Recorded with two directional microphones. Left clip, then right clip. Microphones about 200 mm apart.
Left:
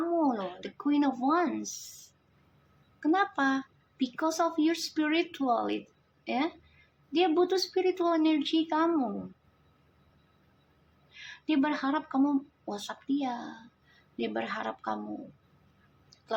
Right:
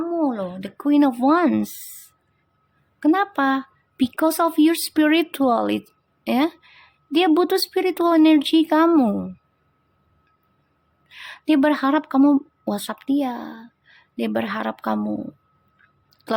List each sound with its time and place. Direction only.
0.1 s a sound: 30° right (ahead or behind)
1.2 s speech: 45° right (ahead or behind)
1.6 s speech: 15° right (ahead or behind)
3.0 s speech: 40° right (ahead or behind)
11.1 s speech: 40° right (ahead or behind)